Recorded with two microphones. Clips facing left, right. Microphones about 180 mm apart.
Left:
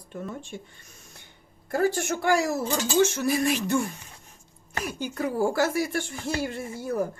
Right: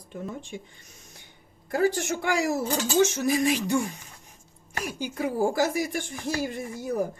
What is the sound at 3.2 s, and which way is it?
Speech, 15° right (ahead or behind).